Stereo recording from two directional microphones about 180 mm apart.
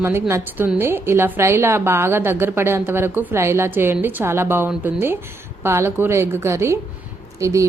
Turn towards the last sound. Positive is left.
turn(degrees=-15)  # may be behind; listen again after turning